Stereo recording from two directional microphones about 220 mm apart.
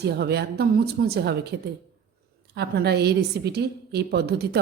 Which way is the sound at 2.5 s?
50° right (ahead or behind).